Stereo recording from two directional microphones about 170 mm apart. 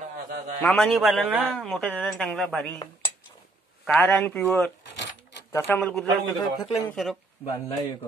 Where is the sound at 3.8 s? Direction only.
5° left (ahead or behind).